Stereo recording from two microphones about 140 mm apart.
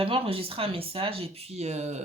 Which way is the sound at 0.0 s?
40° right (ahead or behind).